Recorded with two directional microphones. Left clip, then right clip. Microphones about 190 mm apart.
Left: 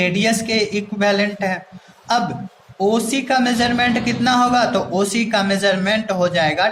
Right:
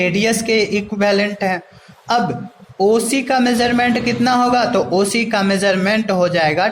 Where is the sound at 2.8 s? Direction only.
35° right (ahead or behind).